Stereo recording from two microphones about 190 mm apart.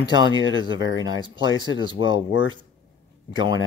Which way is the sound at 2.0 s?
90° left.